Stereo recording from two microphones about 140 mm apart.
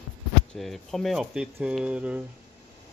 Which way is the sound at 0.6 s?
Centre (ahead or behind).